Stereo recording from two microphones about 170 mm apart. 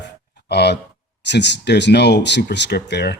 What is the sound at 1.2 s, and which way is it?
Speech, 90° left.